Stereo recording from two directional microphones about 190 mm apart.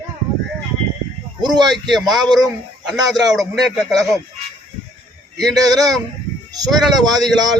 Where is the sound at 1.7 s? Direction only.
Centre (ahead or behind).